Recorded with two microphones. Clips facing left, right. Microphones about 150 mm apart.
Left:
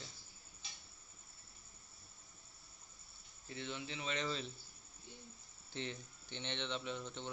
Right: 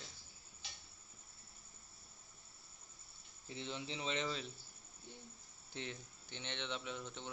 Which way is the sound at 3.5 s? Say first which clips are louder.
Even; 30° right (ahead or behind).